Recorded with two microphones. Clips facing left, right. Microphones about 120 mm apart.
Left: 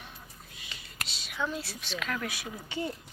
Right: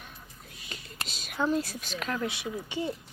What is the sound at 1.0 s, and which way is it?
Speech, 45° right (ahead or behind).